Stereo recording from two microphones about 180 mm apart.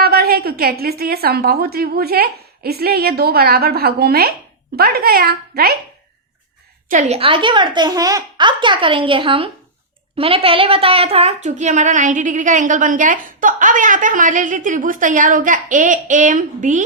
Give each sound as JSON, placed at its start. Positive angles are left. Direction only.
{"t": 0.0, "sound": "a woman's voice", "side_deg": -60}
{"t": 6.8, "sound": "a woman's voice", "side_deg": -45}
{"t": 7.2, "sound": "a child's voice", "side_deg": -30}